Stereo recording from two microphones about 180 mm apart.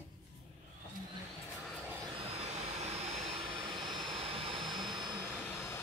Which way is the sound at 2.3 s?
35° right (ahead or behind).